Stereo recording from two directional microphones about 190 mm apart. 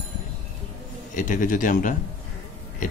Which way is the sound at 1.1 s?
45° left (ahead or behind).